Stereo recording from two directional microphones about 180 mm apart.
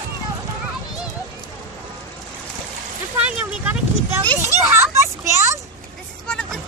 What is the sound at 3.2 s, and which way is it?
Vehicle, 10° right (ahead or behind).